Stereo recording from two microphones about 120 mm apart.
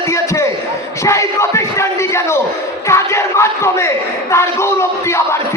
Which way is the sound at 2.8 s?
25° left (ahead or behind).